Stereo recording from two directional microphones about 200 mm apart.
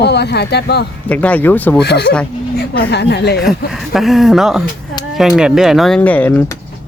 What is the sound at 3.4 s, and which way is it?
Speech, centre (ahead or behind).